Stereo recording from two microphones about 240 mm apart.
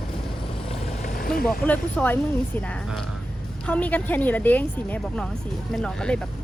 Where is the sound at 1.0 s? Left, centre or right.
Left.